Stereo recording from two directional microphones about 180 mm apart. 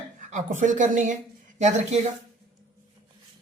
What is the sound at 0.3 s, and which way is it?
A woman's voice, 45° right (ahead or behind).